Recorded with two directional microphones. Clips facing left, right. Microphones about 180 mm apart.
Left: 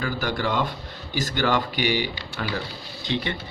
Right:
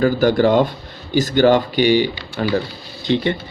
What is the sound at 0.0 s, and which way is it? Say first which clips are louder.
Speech: right 12 dB; 30° right (ahead or behind).